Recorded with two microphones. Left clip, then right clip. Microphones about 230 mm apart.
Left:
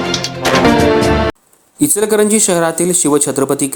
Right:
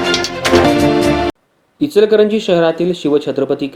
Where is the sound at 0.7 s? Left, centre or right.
Centre.